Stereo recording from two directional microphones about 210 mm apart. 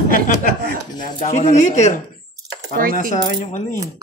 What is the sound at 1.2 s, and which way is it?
Speech, 35° left (ahead or behind).